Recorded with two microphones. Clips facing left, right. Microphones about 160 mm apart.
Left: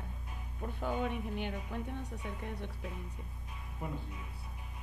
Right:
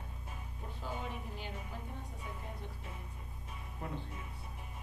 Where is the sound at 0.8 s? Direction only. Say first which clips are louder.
Left 7 dB; 60° left (ahead or behind).